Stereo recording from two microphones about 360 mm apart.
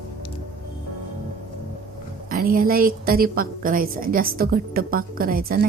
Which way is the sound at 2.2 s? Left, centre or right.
Right.